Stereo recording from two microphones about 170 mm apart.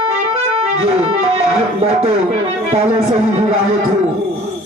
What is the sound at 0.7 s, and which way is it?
Music, 40° right (ahead or behind).